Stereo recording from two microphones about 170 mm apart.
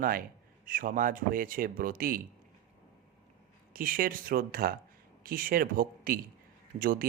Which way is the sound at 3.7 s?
55° right (ahead or behind).